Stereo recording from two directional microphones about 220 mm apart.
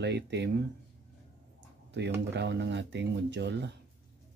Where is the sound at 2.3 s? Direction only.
50° right (ahead or behind).